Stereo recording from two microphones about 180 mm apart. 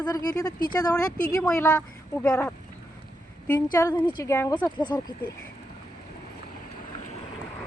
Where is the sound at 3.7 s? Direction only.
20° left (ahead or behind).